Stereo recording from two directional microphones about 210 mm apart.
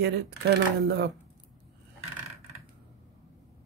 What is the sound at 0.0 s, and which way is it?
Speech, 55° right (ahead or behind).